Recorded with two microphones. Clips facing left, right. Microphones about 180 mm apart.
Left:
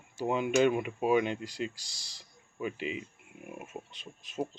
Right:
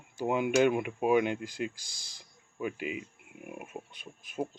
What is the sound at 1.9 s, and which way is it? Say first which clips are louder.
Speech: even; 20° left (ahead or behind).